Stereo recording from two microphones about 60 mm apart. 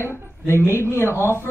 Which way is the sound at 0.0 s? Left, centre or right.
Left.